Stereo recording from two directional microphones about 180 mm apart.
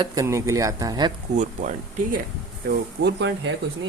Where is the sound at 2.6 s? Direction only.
70° right (ahead or behind).